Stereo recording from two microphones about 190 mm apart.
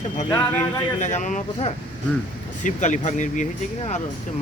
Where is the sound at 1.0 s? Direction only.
40° left (ahead or behind).